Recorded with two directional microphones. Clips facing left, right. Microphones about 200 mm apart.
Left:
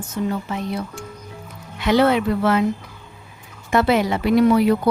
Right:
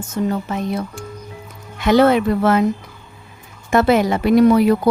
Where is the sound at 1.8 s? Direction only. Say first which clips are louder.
Right 3 dB; 45° right (ahead or behind).